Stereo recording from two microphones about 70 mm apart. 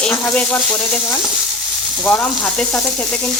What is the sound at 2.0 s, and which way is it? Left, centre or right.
Frying, left.